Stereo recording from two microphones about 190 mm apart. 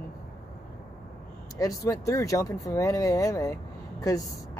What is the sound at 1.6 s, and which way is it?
Speech, 15° left (ahead or behind).